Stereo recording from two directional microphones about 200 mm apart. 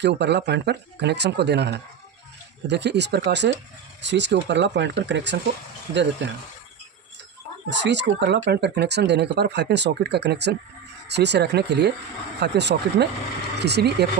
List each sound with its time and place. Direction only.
0.0 s speech: 60° right (ahead or behind)
7.7 s speech: 60° right (ahead or behind)